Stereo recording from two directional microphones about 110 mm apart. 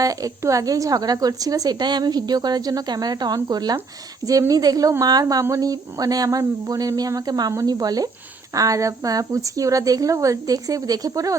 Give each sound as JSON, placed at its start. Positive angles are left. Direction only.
{"t": 0.0, "sound": "a woman's voice", "side_deg": -30}